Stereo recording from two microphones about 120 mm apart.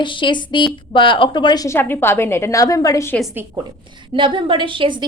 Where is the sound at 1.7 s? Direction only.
20° left (ahead or behind).